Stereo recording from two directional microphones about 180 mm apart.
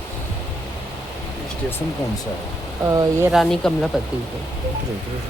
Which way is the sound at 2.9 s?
15° right (ahead or behind).